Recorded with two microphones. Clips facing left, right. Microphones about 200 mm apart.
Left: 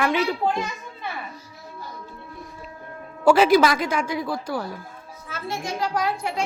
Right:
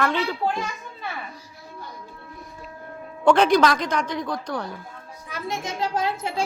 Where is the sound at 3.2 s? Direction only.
5° left (ahead or behind).